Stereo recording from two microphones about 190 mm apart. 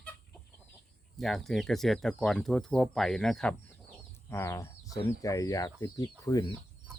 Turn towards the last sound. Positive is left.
turn(degrees=20)  # may be behind; listen again after turning